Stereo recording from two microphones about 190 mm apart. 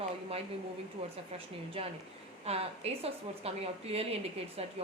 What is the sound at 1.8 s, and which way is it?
A woman's voice, 30° right (ahead or behind).